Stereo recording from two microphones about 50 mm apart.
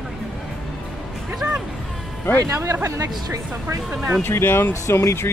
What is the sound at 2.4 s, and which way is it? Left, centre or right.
Speech, right.